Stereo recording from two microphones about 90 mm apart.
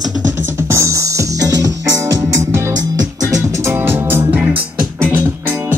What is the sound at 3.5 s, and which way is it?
Music, 30° right (ahead or behind).